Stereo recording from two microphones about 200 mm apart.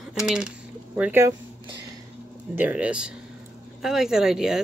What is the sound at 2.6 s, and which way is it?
Speech, 5° right (ahead or behind).